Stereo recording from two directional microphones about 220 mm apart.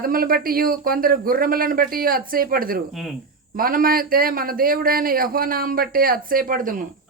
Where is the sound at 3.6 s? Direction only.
40° right (ahead or behind).